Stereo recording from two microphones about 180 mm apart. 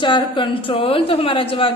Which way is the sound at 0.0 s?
25° left (ahead or behind).